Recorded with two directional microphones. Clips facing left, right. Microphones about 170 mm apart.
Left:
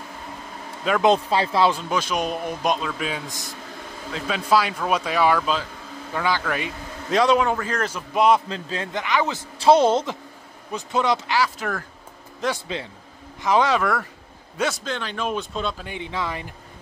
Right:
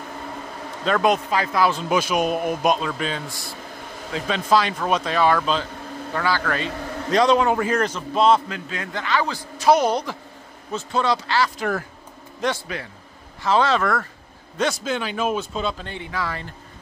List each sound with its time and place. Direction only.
1.0 s a man's voice: 30° left (ahead or behind)
1.9 s speech: 10° right (ahead or behind)
3.3 s a man's voice: 20° left (ahead or behind)
4.1 s speech: 5° left (ahead or behind)
7.5 s a man's voice: 15° right (ahead or behind)
7.8 s speech: 10° left (ahead or behind)
8.5 s a man's voice: 30° left (ahead or behind)
8.9 s a man's voice: 20° left (ahead or behind)
11.4 s speech: centre (ahead or behind)
12.5 s a man's voice: 20° left (ahead or behind)
14.9 s speech: 10° right (ahead or behind)
15.8 s speech: 15° left (ahead or behind)